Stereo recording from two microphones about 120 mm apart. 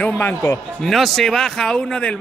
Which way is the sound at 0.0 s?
15° left (ahead or behind).